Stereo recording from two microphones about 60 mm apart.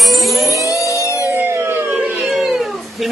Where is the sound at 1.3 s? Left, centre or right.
Right.